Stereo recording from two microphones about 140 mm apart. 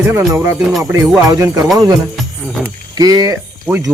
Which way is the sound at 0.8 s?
5° right (ahead or behind).